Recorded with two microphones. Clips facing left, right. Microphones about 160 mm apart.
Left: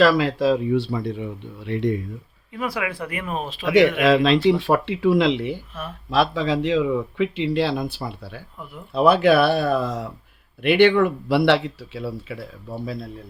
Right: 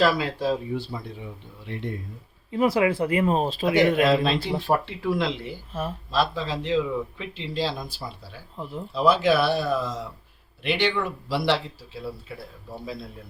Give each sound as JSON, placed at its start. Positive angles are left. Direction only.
{"t": 0.0, "sound": "speech", "side_deg": 85}
{"t": 2.5, "sound": "speech", "side_deg": -25}
{"t": 4.0, "sound": "speech", "side_deg": 90}
{"t": 4.4, "sound": "speech", "side_deg": 75}